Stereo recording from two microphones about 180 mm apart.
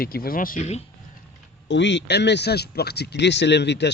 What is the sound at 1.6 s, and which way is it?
A man's voice, 80° left.